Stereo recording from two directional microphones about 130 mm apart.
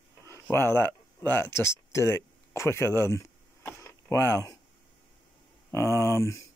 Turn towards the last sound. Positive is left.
turn(degrees=25)  # may be behind; listen again after turning